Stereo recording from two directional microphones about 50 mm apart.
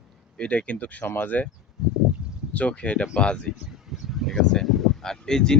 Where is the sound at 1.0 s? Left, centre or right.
Left.